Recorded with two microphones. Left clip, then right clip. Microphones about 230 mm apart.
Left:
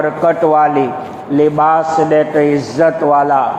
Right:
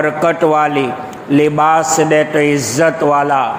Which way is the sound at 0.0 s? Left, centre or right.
Right.